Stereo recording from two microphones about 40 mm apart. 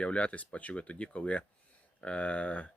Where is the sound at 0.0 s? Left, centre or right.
Left.